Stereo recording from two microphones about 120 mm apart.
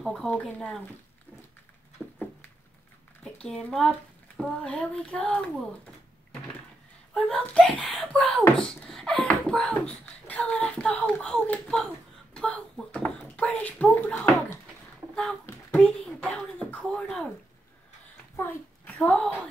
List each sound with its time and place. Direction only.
0.0 s speech: centre (ahead or behind)
0.3 s speech: 10° left (ahead or behind)
2.0 s a sound: centre (ahead or behind)
3.4 s a child's voice: 5° left (ahead or behind)
7.2 s speech: 10° left (ahead or behind)
15.8 s a child's voice: 5° left (ahead or behind)
18.3 s a sound: 20° left (ahead or behind)
18.9 s speech: 5° left (ahead or behind)